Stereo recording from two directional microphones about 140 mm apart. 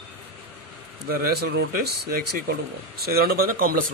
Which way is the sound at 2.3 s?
90° right.